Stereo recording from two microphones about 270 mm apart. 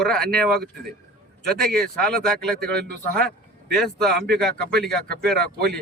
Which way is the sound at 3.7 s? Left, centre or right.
Centre.